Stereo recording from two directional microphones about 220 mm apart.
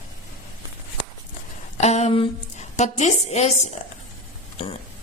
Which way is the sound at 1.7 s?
30° left (ahead or behind).